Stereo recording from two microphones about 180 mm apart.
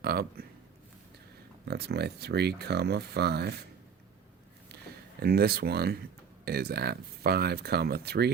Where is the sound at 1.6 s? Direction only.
65° right (ahead or behind).